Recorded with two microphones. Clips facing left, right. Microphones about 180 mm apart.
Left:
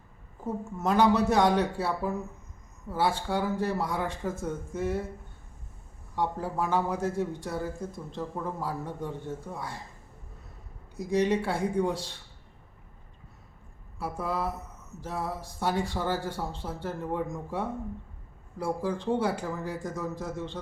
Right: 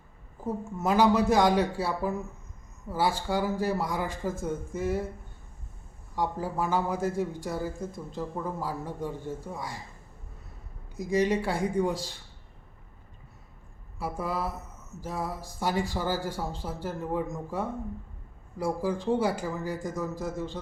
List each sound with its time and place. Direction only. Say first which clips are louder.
0.8 s speech: even; 5° right (ahead or behind)
6.1 s speech: even; centre (ahead or behind)
11.0 s speech: even; 5° right (ahead or behind)
14.0 s speech: even; 5° right (ahead or behind)